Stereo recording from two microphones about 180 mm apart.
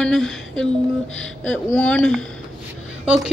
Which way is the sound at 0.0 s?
5° left (ahead or behind).